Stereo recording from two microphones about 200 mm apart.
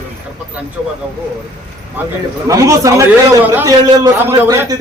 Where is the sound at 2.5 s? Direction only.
15° right (ahead or behind).